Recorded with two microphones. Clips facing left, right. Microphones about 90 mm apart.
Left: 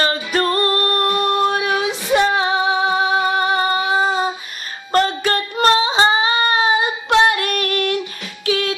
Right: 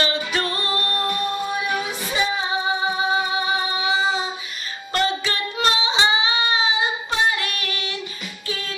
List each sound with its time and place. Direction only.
0.0 s music: 45° left (ahead or behind)
4.9 s child singing: 45° left (ahead or behind)
8.4 s music: 75° left (ahead or behind)